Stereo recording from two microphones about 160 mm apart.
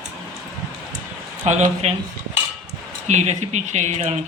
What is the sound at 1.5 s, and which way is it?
Speech, 50° right (ahead or behind).